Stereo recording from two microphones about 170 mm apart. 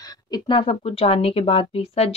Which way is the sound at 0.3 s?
35° left (ahead or behind).